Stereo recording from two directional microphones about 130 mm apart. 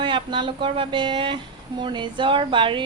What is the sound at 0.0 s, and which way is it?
A woman's voice, 40° right (ahead or behind).